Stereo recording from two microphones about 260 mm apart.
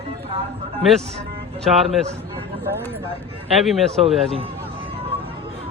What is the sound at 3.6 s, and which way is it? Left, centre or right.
Speech, centre.